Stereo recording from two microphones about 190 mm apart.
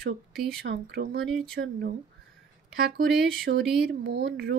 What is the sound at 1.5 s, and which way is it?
A woman's voice, 60° right (ahead or behind).